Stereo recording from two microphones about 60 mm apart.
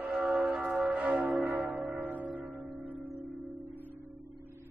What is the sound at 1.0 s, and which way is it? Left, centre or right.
Church bell, right.